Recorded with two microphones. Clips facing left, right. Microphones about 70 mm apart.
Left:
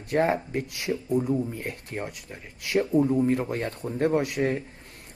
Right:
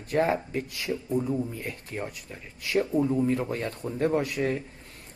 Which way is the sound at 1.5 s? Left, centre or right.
Left.